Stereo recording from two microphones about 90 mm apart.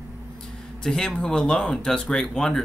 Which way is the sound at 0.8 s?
5° left (ahead or behind).